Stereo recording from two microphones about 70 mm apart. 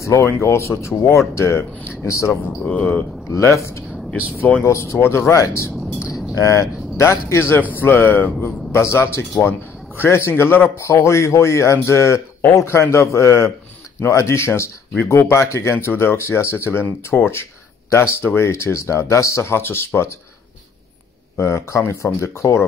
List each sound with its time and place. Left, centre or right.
0.0 s a man's voice: left
2.6 s speech: centre
3.3 s speech: left
5.3 s a man's voice: left
21.4 s a man's voice: left